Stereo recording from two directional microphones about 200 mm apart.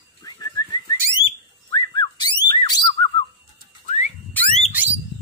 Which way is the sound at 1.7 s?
20° left (ahead or behind).